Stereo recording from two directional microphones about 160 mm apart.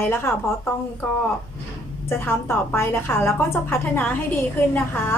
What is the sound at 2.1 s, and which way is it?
A woman's voice, 15° left (ahead or behind).